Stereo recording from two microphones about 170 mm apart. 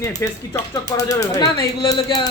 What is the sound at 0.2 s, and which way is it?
Speech, 20° left (ahead or behind).